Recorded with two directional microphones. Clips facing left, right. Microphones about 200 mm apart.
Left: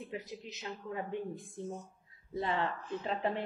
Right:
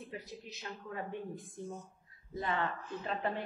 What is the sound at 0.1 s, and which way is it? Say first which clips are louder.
A woman's voice: left 3 dB; 20° left (ahead or behind).